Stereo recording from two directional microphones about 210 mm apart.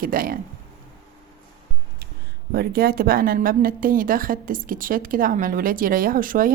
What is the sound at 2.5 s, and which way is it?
A woman's voice, 45° right (ahead or behind).